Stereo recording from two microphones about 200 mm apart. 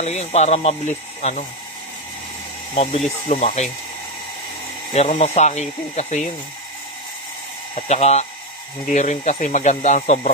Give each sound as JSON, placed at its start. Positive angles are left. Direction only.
{"t": 0.0, "sound": "speech", "side_deg": 35}
{"t": 2.7, "sound": "speech", "side_deg": 30}
{"t": 4.9, "sound": "speech", "side_deg": 35}
{"t": 7.7, "sound": "speech", "side_deg": 35}